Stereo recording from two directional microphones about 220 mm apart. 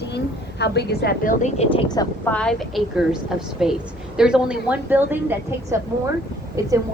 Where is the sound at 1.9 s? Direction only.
15° left (ahead or behind).